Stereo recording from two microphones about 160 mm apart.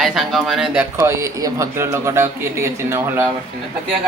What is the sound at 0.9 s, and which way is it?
Speech, 20° right (ahead or behind).